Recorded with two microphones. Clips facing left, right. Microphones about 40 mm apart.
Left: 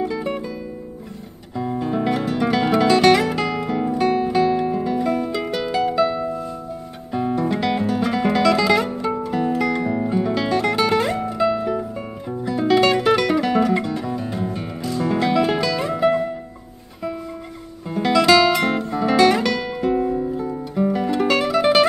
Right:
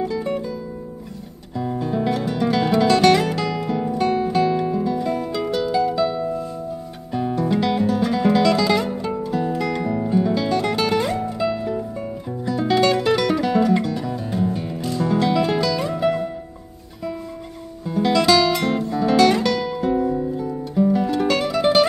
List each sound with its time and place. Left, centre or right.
0.0 s music: centre
1.6 s music: centre
10.6 s music: centre
10.9 s music: centre
17.8 s guitar: centre
20.3 s music: centre